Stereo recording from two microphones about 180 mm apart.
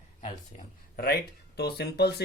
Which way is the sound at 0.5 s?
60° left (ahead or behind).